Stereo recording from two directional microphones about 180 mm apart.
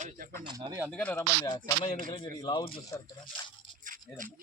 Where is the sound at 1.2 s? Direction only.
20° left (ahead or behind).